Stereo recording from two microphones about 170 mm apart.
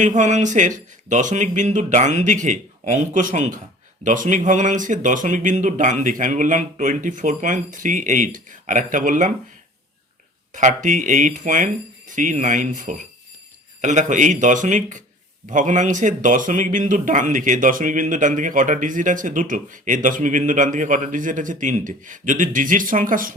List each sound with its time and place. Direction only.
0.0 s speech: 45° right (ahead or behind)
10.5 s speech: 50° right (ahead or behind)